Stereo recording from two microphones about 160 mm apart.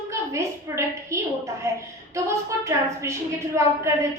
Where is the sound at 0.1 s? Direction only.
20° right (ahead or behind).